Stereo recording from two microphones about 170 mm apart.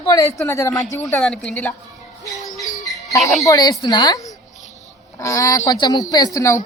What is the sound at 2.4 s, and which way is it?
Music, 20° left (ahead or behind).